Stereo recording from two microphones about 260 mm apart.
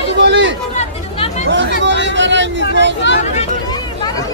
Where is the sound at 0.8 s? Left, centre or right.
Left.